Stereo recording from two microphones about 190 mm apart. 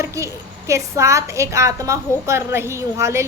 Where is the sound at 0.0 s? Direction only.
15° right (ahead or behind).